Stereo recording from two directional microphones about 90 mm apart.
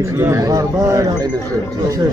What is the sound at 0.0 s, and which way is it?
Speech, 30° right (ahead or behind).